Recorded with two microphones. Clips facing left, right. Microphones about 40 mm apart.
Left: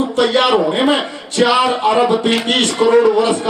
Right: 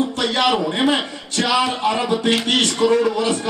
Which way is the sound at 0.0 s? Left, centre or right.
Centre.